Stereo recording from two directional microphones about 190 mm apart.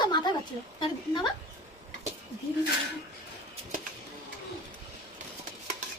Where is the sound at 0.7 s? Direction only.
25° left (ahead or behind).